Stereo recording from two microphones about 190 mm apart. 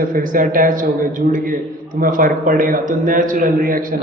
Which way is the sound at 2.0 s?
45° right (ahead or behind).